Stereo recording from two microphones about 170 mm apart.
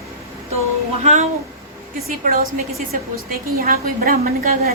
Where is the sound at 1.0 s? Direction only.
40° right (ahead or behind).